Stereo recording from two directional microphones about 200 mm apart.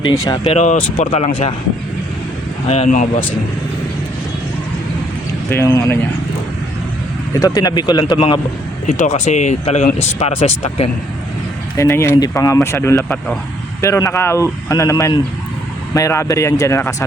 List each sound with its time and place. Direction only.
0.1 s speech: 25° left (ahead or behind)
2.6 s speech: 30° left (ahead or behind)
5.5 s speech: 15° left (ahead or behind)
7.3 s speech: 20° left (ahead or behind)
8.9 s speech: 35° left (ahead or behind)
11.8 s speech: 15° left (ahead or behind)